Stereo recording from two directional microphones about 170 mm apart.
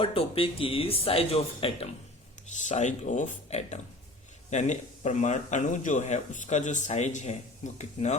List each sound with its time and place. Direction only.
0.0 s speech: 35° left (ahead or behind)
2.5 s speech: 45° left (ahead or behind)